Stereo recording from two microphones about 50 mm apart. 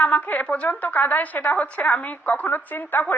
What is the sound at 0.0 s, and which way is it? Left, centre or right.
A woman's voice, left.